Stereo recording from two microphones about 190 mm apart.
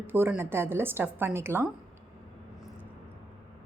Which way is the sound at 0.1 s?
10° right (ahead or behind).